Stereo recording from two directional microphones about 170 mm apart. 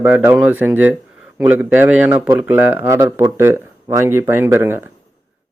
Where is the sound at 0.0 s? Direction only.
10° right (ahead or behind).